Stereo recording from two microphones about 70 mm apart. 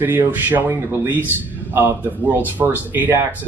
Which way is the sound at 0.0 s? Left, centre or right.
Right.